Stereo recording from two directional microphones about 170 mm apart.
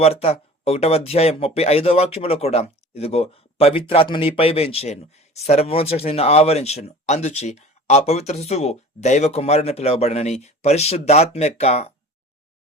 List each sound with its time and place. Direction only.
0.0 s speech: 35° left (ahead or behind)